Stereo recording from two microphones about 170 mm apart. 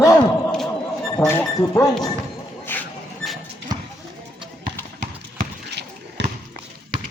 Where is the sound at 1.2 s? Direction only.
15° left (ahead or behind).